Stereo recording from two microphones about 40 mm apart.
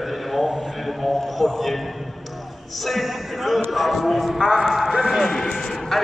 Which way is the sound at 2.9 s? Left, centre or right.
Centre.